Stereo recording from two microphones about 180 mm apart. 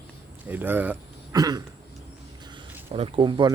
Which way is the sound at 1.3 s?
20° right (ahead or behind).